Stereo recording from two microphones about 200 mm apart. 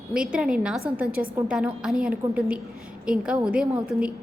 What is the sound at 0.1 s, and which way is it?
A woman's voice, 5° right (ahead or behind).